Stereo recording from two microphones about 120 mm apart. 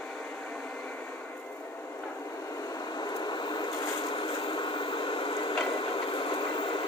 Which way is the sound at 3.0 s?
40° left (ahead or behind).